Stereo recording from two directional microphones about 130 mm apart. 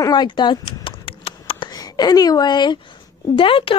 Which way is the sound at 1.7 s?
30° left (ahead or behind).